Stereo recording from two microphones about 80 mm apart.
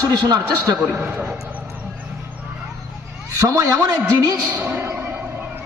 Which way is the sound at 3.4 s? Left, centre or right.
Right.